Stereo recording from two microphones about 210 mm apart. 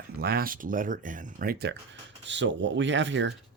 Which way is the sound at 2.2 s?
60° right (ahead or behind).